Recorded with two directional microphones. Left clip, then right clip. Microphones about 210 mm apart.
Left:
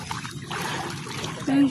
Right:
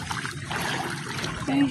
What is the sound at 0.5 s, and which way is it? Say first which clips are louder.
Pour: right 1 dB; 25° right (ahead or behind).